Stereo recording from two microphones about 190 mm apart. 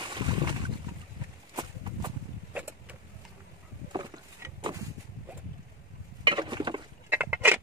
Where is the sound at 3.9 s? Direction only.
20° right (ahead or behind).